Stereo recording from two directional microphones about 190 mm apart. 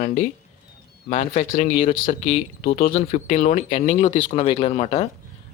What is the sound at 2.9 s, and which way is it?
Speech, 35° left (ahead or behind).